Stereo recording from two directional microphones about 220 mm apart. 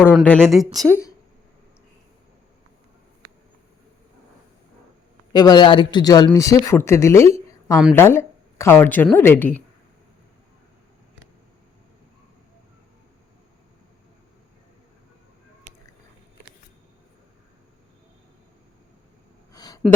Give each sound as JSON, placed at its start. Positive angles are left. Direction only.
{"t": 0.1, "sound": "a woman's voice", "side_deg": 0}
{"t": 5.3, "sound": "a man's voice", "side_deg": 20}
{"t": 19.5, "sound": "a sound", "side_deg": 15}